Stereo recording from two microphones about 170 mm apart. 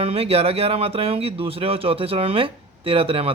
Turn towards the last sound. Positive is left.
turn(degrees=-35)  # may be behind; listen again after turning